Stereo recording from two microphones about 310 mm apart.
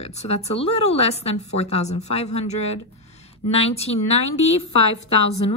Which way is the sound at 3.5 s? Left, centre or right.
Centre.